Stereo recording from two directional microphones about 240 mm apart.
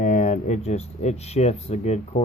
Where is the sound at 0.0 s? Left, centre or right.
Left.